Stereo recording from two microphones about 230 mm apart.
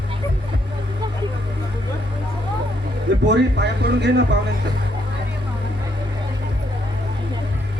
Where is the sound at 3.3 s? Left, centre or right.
Right.